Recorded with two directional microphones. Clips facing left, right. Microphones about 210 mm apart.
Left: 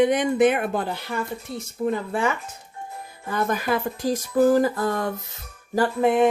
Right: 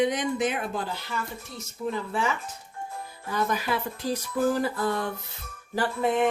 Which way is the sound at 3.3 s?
50° left (ahead or behind).